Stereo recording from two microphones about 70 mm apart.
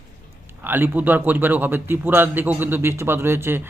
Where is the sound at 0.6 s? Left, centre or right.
Right.